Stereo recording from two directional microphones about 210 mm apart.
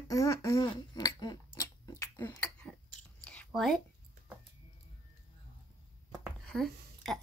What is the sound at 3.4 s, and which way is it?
Speech, centre (ahead or behind).